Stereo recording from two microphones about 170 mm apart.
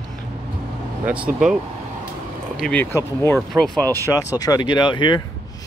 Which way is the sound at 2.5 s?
5° left (ahead or behind).